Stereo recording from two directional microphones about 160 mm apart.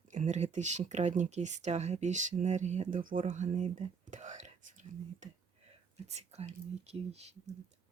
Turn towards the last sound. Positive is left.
turn(degrees=-40)  # may be behind; listen again after turning